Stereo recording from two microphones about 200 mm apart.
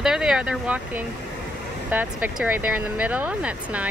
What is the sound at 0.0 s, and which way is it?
Speech, 5° right (ahead or behind).